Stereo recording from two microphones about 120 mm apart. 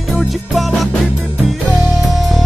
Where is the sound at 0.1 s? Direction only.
Centre (ahead or behind).